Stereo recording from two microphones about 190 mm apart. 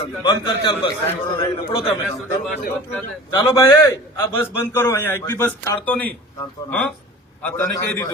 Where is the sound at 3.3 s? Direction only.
15° left (ahead or behind).